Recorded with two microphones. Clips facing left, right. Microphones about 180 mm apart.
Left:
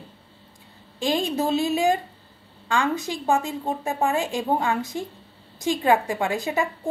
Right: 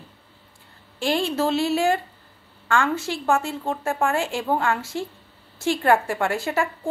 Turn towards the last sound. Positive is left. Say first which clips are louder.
# right 1 dB
turn(degrees=15)  # may be behind; listen again after turning